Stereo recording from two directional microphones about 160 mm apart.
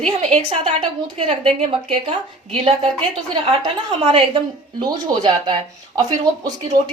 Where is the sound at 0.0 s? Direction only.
40° right (ahead or behind).